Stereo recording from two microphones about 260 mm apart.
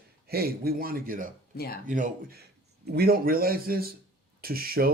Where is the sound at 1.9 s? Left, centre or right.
Right.